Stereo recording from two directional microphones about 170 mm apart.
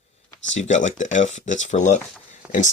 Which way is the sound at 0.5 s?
45° left (ahead or behind).